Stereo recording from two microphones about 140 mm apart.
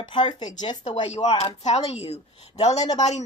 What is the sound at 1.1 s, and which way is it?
A child's voice, 50° left (ahead or behind).